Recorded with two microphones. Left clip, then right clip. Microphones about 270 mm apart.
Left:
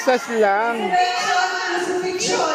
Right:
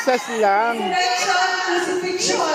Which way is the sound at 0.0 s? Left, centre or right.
Centre.